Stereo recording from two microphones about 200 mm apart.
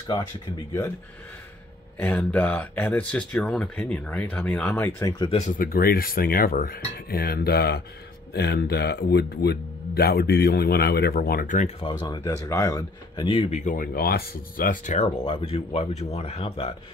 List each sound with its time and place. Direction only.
2.0 s speech: 5° left (ahead or behind)
5.6 s speech: 50° left (ahead or behind)
12.0 s speech: 20° left (ahead or behind)